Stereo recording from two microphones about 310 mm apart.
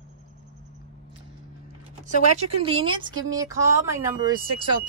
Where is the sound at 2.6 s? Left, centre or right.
Centre.